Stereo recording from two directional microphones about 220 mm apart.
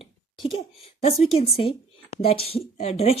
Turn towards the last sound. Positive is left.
turn(degrees=25)  # may be behind; listen again after turning